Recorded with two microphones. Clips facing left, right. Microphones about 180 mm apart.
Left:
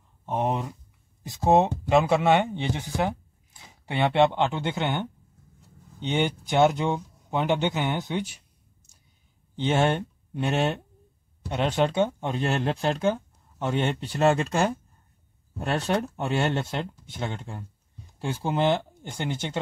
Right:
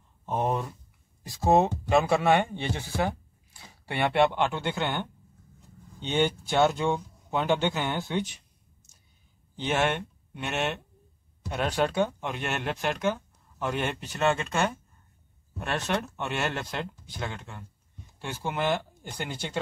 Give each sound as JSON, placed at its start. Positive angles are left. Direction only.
{"t": 0.3, "sound": "speech", "side_deg": 15}
{"t": 9.6, "sound": "speech", "side_deg": 30}
{"t": 11.4, "sound": "speech", "side_deg": 25}